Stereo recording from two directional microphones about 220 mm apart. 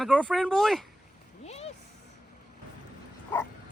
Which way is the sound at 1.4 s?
30° left (ahead or behind).